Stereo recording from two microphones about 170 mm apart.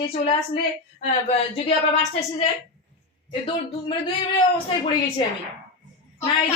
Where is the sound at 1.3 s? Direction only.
35° left (ahead or behind).